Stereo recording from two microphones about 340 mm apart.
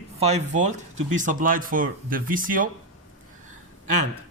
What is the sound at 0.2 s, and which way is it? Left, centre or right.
Speech, centre.